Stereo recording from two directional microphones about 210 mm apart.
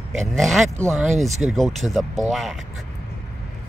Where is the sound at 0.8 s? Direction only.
10° right (ahead or behind).